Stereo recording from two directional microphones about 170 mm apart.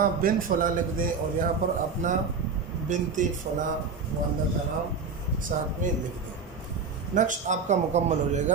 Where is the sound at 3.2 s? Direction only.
45° right (ahead or behind).